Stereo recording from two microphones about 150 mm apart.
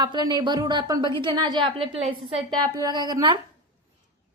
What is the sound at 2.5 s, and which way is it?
Speech, 25° right (ahead or behind).